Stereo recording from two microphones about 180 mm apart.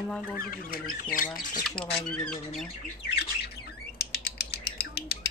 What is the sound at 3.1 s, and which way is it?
Bird, 65° left (ahead or behind).